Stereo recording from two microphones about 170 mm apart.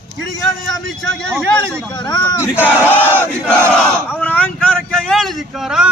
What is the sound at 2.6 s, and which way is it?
Battle cry, 10° left (ahead or behind).